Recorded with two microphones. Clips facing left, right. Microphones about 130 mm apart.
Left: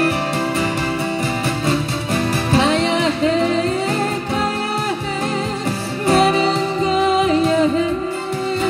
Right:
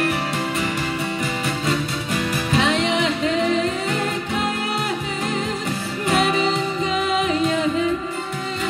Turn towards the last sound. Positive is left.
turn(degrees=35)  # may be behind; listen again after turning